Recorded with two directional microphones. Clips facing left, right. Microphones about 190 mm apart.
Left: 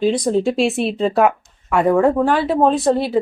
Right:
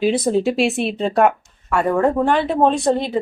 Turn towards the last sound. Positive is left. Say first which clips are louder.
# left 2 dB
turn(degrees=5)  # may be behind; listen again after turning